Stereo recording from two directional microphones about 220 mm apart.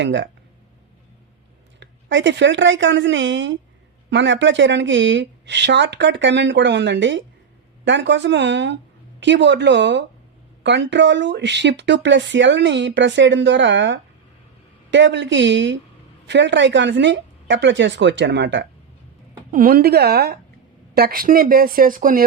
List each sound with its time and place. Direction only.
0.0 s speech: 55° right (ahead or behind)
1.8 s speech: 55° right (ahead or behind)
19.5 s speech: 40° right (ahead or behind)